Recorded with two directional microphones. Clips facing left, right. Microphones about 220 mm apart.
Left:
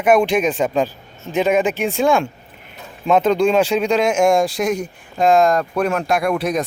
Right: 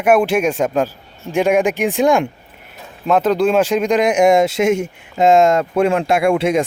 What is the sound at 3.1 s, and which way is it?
Speech, 5° right (ahead or behind).